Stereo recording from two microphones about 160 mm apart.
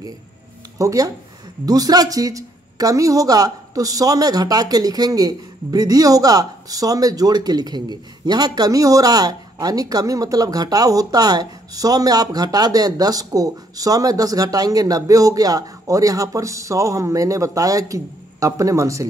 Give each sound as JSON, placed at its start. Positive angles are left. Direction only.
{"t": 0.7, "sound": "a woman's voice", "side_deg": -20}